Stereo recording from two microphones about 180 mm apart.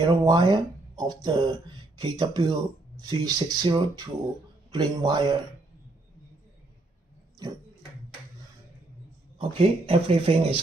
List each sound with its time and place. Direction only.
0.0 s speech: 25° right (ahead or behind)
9.4 s speech: 30° right (ahead or behind)